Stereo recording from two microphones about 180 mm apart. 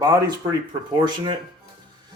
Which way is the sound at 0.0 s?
20° right (ahead or behind).